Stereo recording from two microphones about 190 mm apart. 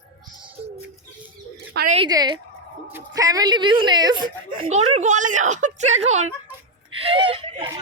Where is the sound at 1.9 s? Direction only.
25° right (ahead or behind).